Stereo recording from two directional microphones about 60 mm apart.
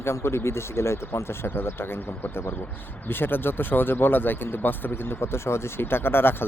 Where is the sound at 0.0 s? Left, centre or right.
Left.